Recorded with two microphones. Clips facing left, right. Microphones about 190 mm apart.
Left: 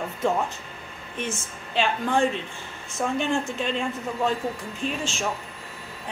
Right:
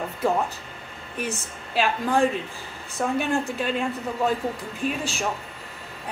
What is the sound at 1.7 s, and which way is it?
Speech, 5° right (ahead or behind).